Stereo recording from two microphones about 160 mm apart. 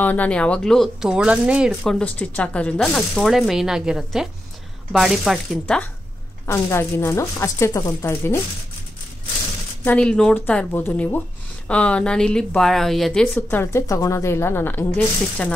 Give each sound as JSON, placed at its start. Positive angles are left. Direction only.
{"t": 0.0, "sound": "speech", "side_deg": 10}
{"t": 1.8, "sound": "speech", "side_deg": 10}
{"t": 6.4, "sound": "speech", "side_deg": 15}
{"t": 9.8, "sound": "speech", "side_deg": 5}